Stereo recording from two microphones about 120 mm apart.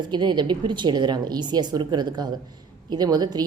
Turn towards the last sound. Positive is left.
turn(degrees=-35)  # may be behind; listen again after turning